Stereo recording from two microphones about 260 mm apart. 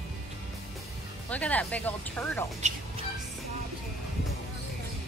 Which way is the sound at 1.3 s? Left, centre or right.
Centre.